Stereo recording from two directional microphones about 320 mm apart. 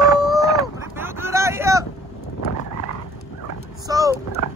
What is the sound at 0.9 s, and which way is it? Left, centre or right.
Vehicle, centre.